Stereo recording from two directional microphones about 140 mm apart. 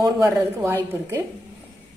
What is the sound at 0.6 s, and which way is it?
Speech, 20° right (ahead or behind).